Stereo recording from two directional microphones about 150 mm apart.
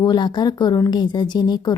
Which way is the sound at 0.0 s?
30° left (ahead or behind).